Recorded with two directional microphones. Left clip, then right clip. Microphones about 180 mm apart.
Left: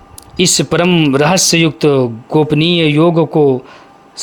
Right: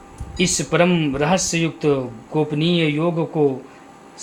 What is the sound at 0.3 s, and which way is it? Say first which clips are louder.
Speech: left 6 dB; 50° left (ahead or behind).